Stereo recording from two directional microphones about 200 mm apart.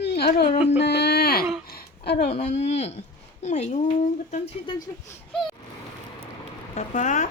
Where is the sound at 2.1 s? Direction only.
30° left (ahead or behind).